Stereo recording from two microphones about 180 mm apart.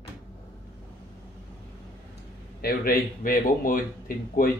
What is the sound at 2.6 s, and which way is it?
A man's voice, 55° left (ahead or behind).